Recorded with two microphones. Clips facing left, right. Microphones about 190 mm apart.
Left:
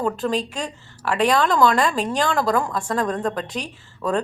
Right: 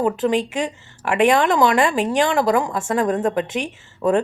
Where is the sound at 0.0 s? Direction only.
20° right (ahead or behind).